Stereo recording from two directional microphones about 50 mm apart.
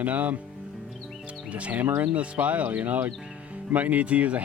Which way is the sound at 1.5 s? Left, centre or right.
Right.